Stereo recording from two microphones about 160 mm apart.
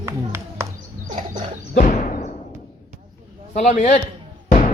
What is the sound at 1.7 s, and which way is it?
Music, 55° left (ahead or behind).